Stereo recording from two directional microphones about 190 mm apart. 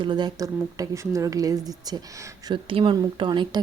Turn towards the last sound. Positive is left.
turn(degrees=-25)  # may be behind; listen again after turning